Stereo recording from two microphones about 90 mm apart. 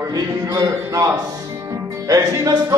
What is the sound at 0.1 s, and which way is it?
Music, 40° right (ahead or behind).